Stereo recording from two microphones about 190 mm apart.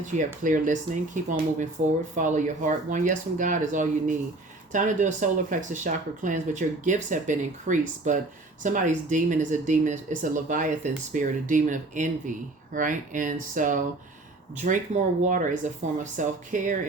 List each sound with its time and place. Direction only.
0.4 s speech: 40° right (ahead or behind)